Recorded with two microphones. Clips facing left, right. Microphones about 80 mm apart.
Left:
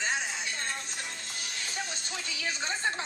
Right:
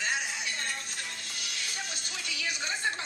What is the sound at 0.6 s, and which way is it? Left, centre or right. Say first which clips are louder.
Speech: left 1 dB; left.